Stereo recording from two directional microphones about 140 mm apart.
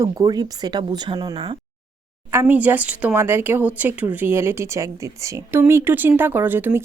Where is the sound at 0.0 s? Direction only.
30° right (ahead or behind).